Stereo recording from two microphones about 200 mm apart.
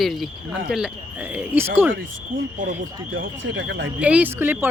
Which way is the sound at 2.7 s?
70° right (ahead or behind).